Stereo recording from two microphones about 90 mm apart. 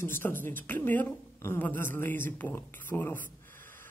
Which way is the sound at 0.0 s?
25° left (ahead or behind).